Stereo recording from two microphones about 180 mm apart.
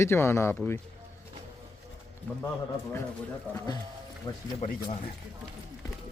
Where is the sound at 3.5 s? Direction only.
10° left (ahead or behind).